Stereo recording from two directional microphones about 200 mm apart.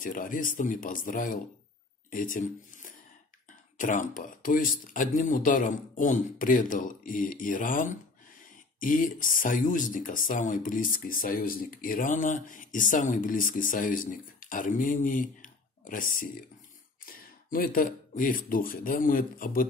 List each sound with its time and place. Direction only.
0.0 s speech: 40° left (ahead or behind)